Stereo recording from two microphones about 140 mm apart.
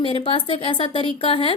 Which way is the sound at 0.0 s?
40° left (ahead or behind).